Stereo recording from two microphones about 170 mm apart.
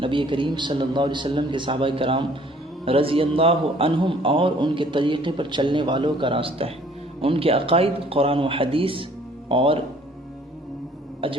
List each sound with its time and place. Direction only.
0.0 s a man's voice: 30° right (ahead or behind)
11.2 s speech: 30° right (ahead or behind)